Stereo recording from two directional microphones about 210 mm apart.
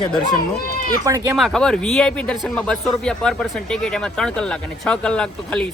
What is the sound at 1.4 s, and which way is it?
A man's voice, centre (ahead or behind).